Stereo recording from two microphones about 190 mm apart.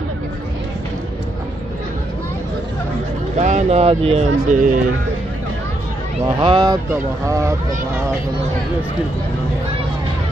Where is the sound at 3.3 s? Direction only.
40° right (ahead or behind).